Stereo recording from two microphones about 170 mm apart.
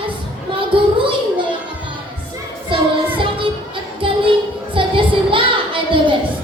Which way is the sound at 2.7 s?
30° right (ahead or behind).